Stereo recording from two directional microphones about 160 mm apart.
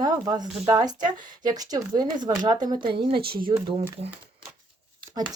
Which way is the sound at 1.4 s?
25° right (ahead or behind).